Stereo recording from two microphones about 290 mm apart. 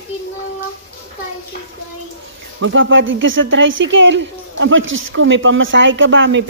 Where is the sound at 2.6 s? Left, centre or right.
Right.